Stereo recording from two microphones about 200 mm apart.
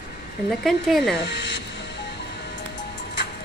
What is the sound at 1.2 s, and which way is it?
Speech, 60° left (ahead or behind).